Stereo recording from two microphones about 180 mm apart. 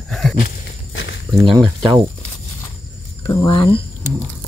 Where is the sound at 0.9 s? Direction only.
90° left.